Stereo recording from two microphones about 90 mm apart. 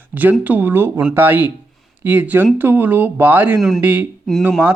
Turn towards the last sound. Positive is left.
turn(degrees=-10)  # may be behind; listen again after turning